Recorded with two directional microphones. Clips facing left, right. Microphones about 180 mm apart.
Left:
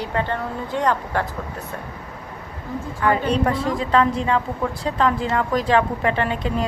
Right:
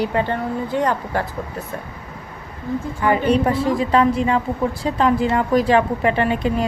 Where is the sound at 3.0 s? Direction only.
10° right (ahead or behind).